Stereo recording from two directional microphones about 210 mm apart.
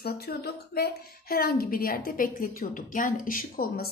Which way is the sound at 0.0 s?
50° left (ahead or behind).